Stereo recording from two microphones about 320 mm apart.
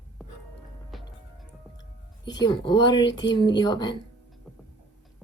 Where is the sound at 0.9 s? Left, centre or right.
Centre.